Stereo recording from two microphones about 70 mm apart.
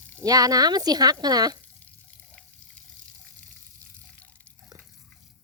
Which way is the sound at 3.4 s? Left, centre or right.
Left.